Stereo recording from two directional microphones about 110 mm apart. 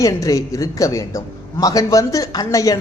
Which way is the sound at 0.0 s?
30° left (ahead or behind).